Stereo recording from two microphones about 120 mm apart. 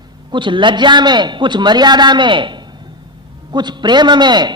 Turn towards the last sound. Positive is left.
turn(degrees=-40)  # may be behind; listen again after turning